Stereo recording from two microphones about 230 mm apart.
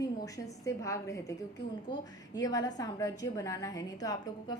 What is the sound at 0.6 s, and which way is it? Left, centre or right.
A woman's voice, centre.